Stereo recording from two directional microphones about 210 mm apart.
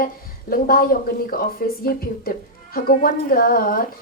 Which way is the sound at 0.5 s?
45° left (ahead or behind).